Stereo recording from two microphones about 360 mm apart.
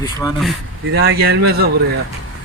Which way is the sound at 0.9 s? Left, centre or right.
Right.